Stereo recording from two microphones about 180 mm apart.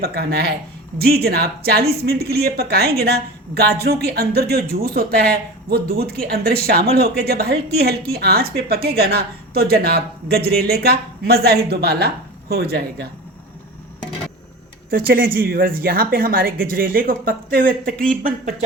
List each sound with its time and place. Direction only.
0.0 s speech: 60° right (ahead or behind)
14.8 s speech: 55° right (ahead or behind)